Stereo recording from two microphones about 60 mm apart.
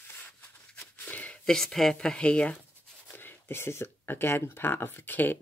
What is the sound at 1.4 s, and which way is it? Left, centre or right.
Speech, centre.